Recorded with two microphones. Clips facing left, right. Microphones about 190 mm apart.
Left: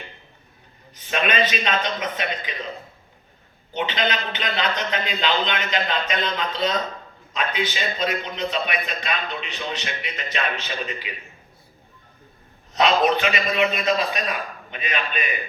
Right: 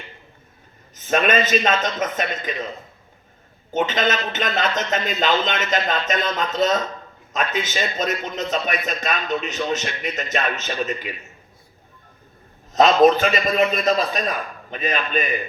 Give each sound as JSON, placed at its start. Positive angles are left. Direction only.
{"t": 0.9, "sound": "a man's voice", "side_deg": -45}
{"t": 3.7, "sound": "a man's voice", "side_deg": -45}
{"t": 12.7, "sound": "a man's voice", "side_deg": -40}